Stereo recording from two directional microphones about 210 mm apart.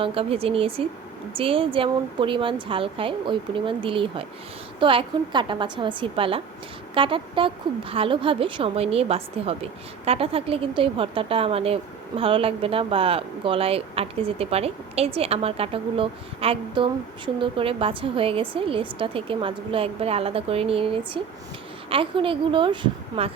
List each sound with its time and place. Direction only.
0.0 s speech: 25° right (ahead or behind)